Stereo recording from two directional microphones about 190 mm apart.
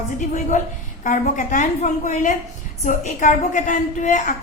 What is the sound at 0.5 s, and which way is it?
A woman's voice, 40° left (ahead or behind).